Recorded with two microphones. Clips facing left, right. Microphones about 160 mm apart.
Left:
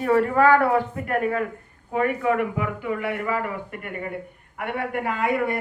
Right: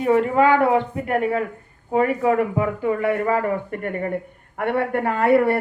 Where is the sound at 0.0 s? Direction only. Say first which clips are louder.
Right 2 dB; 20° right (ahead or behind).